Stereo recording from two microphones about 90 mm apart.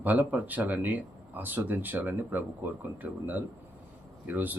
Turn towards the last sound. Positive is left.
turn(degrees=-20)  # may be behind; listen again after turning